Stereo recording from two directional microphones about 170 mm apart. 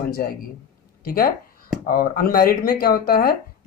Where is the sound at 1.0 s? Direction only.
60° left (ahead or behind).